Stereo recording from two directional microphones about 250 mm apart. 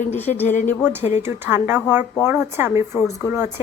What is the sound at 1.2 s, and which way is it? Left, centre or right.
Speech, centre.